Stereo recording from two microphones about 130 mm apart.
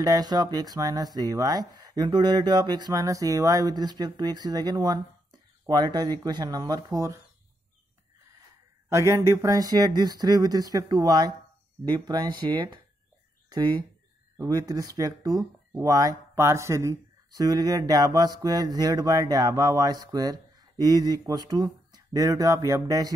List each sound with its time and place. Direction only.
0.0 s speech: 30° right (ahead or behind)
8.8 s speech: 25° right (ahead or behind)